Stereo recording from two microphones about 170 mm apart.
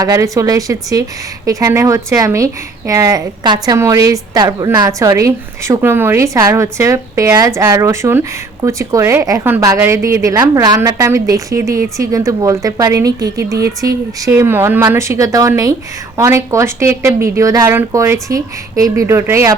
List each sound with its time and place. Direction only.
0.0 s speech: 20° right (ahead or behind)